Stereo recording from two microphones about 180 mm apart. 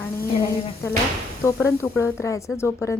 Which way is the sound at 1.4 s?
15° left (ahead or behind).